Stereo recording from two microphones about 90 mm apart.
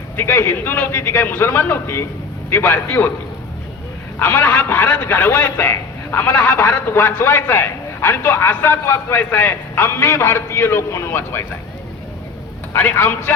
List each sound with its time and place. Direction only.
0.2 s a man's voice: 25° left (ahead or behind)
4.2 s a man's voice: 20° left (ahead or behind)
12.7 s a man's voice: 20° left (ahead or behind)